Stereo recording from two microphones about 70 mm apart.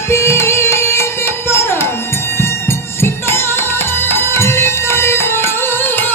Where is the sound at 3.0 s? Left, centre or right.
Left.